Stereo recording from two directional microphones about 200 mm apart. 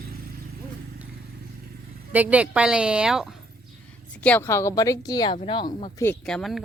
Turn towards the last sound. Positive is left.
turn(degrees=0)  # may be behind; listen again after turning